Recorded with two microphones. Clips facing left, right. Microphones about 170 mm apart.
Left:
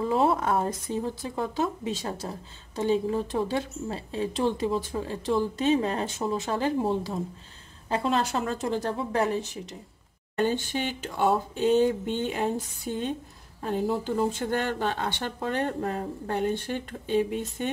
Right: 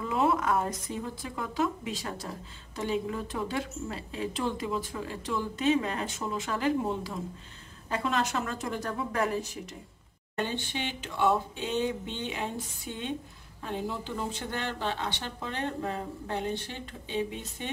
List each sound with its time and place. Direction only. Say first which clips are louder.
0.0 s speech: left 3 dB; 35° left (ahead or behind)
10.3 s speech: left 7 dB; 40° left (ahead or behind)